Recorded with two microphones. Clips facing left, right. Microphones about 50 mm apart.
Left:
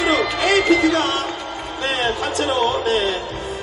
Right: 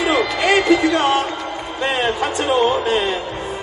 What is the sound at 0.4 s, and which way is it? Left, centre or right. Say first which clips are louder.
Speech: right 1 dB; centre.